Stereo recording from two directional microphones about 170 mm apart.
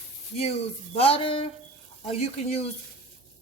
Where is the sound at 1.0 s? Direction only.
35° left (ahead or behind).